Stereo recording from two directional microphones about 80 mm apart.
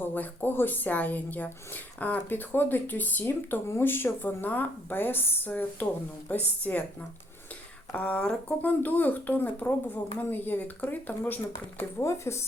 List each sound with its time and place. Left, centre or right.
0.0 s speech: left
7.9 s speech: centre
8.8 s speech: left
11.8 s speech: left